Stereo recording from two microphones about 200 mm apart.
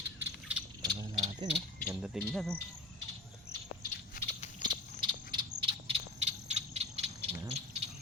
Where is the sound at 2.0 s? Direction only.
Centre (ahead or behind).